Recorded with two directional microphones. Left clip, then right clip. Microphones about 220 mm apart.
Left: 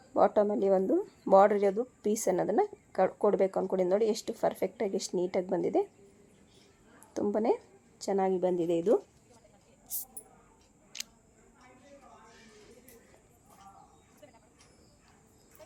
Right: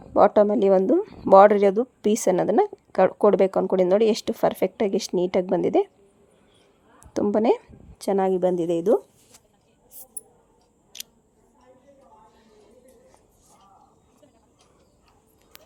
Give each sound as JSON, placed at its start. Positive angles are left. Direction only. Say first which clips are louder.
{"t": 0.1, "sound": "speech", "louder": "right 9 dB", "side_deg": -35}
{"t": 7.1, "sound": "a woman's voice", "louder": "right 8 dB", "side_deg": -35}
{"t": 10.9, "sound": "scissors", "louder": "right 2 dB", "side_deg": -5}